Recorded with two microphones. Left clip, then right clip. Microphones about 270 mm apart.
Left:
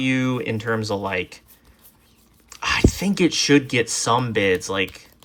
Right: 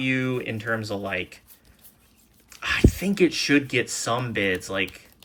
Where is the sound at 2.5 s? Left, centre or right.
Centre.